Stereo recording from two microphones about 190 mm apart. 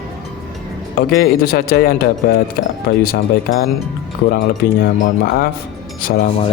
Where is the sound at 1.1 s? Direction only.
50° left (ahead or behind).